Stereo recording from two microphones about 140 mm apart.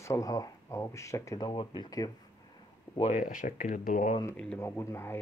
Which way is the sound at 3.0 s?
65° left (ahead or behind).